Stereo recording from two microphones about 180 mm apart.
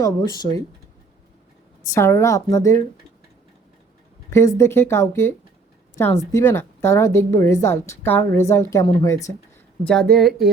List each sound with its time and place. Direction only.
0.0 s speech: 20° left (ahead or behind)
1.9 s a woman's voice: 15° left (ahead or behind)
4.3 s a woman's voice: 15° left (ahead or behind)
9.8 s speech: 5° left (ahead or behind)